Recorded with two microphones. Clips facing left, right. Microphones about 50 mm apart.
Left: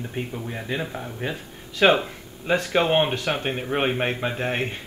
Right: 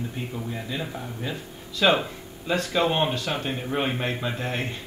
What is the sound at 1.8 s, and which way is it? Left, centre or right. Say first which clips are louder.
Speech: left 3 dB; left.